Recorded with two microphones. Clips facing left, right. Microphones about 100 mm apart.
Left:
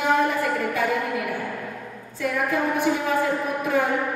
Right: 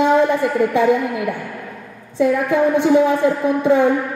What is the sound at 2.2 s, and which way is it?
Speech, 25° right (ahead or behind).